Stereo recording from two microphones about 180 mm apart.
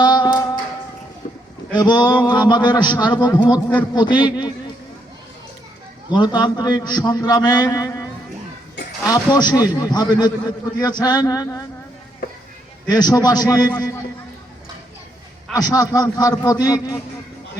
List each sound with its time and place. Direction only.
0.0 s a sound: 25° left (ahead or behind)
1.7 s a man's voice: 25° left (ahead or behind)
6.1 s a man's voice: 25° left (ahead or behind)
9.0 s a man's voice: 20° left (ahead or behind)
12.9 s a man's voice: 20° left (ahead or behind)
15.5 s a man's voice: 20° left (ahead or behind)